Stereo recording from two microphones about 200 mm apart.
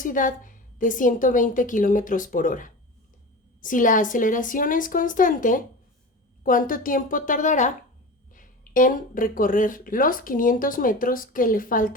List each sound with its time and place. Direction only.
0.0 s a woman's voice: 40° left (ahead or behind)